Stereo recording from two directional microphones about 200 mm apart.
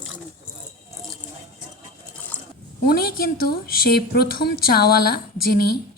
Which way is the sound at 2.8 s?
50° left (ahead or behind).